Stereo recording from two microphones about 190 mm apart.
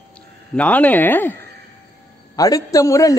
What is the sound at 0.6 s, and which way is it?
A man's voice, 10° left (ahead or behind).